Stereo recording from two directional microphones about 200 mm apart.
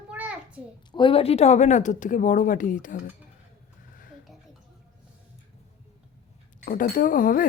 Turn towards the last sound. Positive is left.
turn(degrees=40)  # may be behind; listen again after turning